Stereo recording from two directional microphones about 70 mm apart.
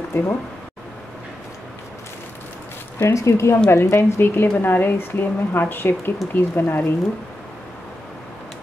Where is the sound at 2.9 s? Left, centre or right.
Left.